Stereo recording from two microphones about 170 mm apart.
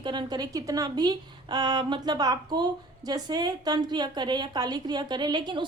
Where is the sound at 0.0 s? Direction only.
25° right (ahead or behind).